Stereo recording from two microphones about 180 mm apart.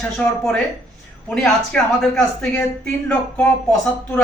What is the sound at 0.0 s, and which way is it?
Speech, 5° left (ahead or behind).